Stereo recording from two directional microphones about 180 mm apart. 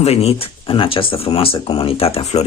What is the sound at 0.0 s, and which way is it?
Speech, 35° left (ahead or behind).